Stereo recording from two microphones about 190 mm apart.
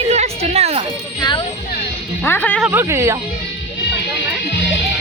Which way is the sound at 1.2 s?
25° left (ahead or behind).